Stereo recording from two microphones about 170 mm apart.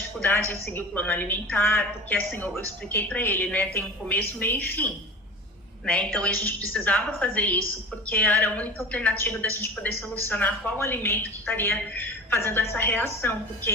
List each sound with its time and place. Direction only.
0.2 s a woman's voice: 10° left (ahead or behind)